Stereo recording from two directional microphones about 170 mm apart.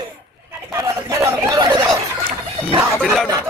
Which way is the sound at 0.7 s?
20° right (ahead or behind).